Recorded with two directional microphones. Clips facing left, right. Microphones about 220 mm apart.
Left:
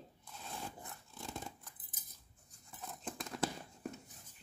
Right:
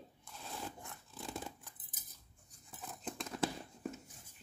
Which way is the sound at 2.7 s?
Centre (ahead or behind).